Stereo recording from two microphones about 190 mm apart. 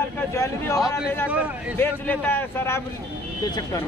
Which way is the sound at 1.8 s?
10° left (ahead or behind).